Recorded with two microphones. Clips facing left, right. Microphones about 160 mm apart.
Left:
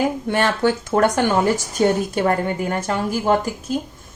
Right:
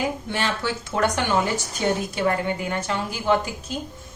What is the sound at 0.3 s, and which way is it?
A woman's voice, 55° left (ahead or behind).